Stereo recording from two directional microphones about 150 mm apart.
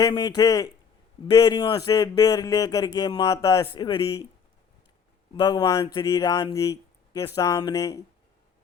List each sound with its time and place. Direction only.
0.0 s speech: 25° left (ahead or behind)
5.3 s speech: 30° left (ahead or behind)